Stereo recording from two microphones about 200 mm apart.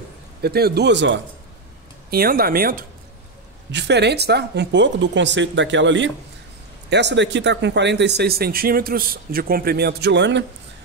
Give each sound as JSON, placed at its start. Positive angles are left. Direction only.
{"t": 0.4, "sound": "speech", "side_deg": -50}
{"t": 2.0, "sound": "speech", "side_deg": -50}
{"t": 3.7, "sound": "speech", "side_deg": -60}